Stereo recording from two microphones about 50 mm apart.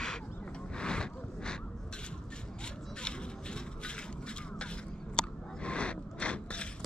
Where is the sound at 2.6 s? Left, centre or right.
Centre.